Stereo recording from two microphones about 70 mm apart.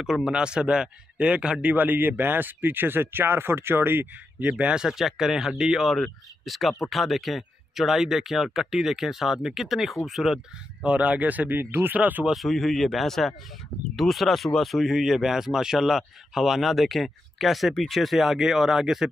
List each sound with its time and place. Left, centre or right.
0.0 s speech: centre; by 4.5 s right
4.5 s speech: centre
10.8 s speech: centre
12.3 s speech: centre